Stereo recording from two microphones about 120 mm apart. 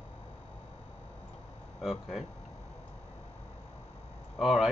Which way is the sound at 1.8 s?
5° right (ahead or behind).